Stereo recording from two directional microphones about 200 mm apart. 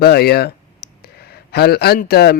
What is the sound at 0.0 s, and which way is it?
Speech, 50° left (ahead or behind).